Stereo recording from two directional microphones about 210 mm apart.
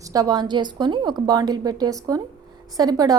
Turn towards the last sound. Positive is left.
turn(degrees=-20)  # may be behind; listen again after turning